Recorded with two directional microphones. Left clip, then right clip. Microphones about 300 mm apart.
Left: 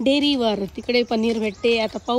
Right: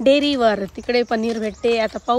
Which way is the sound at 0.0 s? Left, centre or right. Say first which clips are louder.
Right 4 dB; centre.